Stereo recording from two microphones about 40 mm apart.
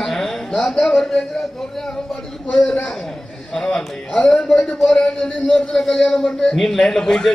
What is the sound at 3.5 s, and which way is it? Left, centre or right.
A woman's voice, centre.